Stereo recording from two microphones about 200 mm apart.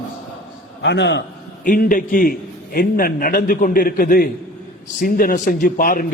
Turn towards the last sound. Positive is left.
turn(degrees=45)  # may be behind; listen again after turning